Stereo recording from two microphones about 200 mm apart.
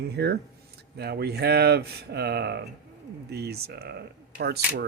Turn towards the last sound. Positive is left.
turn(degrees=-55)  # may be behind; listen again after turning